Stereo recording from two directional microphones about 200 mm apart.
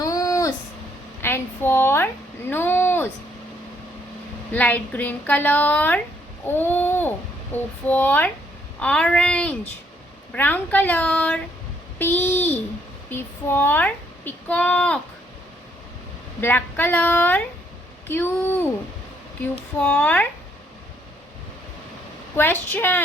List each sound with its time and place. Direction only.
0.0 s a sound: 15° left (ahead or behind)
4.5 s speech: 10° left (ahead or behind)
6.4 s a sound: 10° left (ahead or behind)
7.5 s speech: 10° left (ahead or behind)
16.4 s speech: 10° left (ahead or behind)
19.8 s speech: 10° left (ahead or behind)
22.4 s speech: 10° left (ahead or behind)